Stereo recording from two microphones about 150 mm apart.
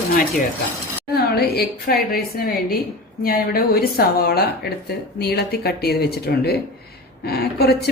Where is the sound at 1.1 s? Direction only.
90° left.